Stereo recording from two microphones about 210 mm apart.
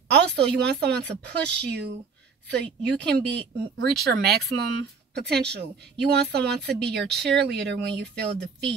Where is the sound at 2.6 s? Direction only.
5° left (ahead or behind).